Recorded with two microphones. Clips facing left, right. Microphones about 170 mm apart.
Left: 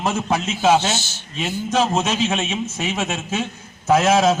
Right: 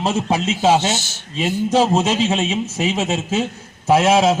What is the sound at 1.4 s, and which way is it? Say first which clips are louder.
A man's voice: right 4 dB; 35° right (ahead or behind).